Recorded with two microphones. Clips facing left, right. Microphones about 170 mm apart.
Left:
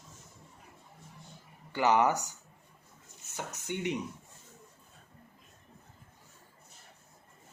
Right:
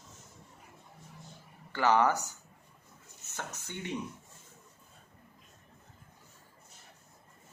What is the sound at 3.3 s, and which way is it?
Speech, 15° left (ahead or behind).